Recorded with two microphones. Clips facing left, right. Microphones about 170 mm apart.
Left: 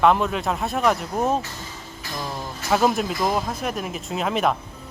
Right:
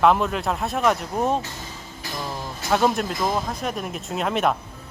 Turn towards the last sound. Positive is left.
turn(degrees=0)  # may be behind; listen again after turning